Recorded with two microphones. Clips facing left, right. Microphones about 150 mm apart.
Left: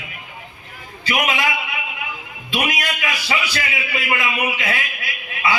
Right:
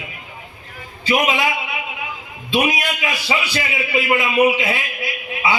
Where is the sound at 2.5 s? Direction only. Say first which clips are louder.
Right 4 dB; 25° right (ahead or behind).